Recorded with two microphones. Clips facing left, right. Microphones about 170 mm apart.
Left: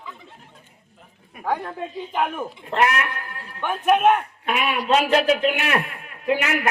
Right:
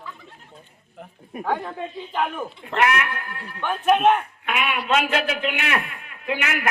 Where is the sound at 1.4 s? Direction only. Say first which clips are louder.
Even; 5° left (ahead or behind).